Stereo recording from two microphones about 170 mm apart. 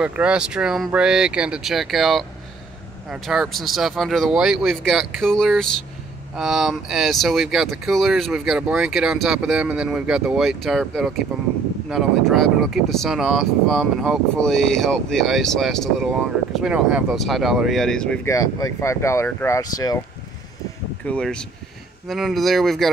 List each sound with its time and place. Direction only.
0.0 s speech: 5° right (ahead or behind)
18.2 s speech: 20° left (ahead or behind)
21.0 s speech: 5° left (ahead or behind)